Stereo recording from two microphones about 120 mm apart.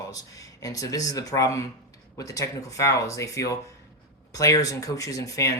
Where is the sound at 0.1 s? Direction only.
30° left (ahead or behind).